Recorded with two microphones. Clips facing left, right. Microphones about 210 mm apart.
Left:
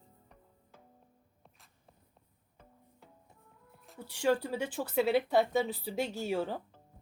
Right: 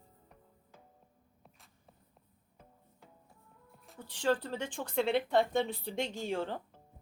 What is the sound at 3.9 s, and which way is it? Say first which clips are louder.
Speech: left 2 dB; 10° left (ahead or behind).